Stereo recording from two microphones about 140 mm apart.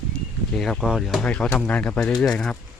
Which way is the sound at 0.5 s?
5° left (ahead or behind).